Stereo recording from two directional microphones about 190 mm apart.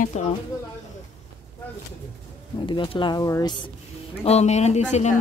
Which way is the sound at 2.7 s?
25° left (ahead or behind).